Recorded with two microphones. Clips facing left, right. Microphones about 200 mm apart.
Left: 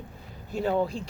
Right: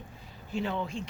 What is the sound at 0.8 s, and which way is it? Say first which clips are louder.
Speech: left 7 dB; 35° left (ahead or behind).